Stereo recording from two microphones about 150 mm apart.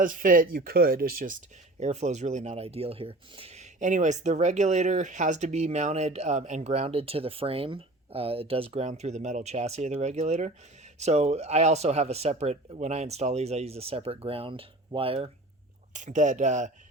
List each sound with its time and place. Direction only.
0.0 s speech: 65° right (ahead or behind)
1.8 s speech: 50° right (ahead or behind)
8.9 s speech: 50° right (ahead or behind)
15.9 s speech: 55° right (ahead or behind)